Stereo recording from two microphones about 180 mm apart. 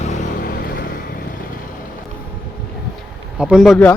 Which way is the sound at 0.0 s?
40° left (ahead or behind).